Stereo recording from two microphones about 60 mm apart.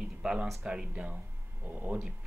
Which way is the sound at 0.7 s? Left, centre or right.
Centre.